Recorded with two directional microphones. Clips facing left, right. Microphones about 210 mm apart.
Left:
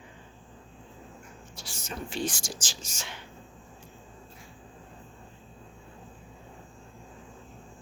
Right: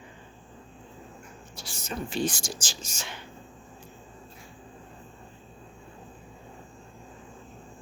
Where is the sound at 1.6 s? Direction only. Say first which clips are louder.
Right 4 dB; 35° right (ahead or behind).